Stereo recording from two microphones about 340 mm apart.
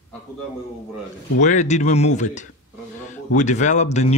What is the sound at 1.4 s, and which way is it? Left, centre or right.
Speech, left.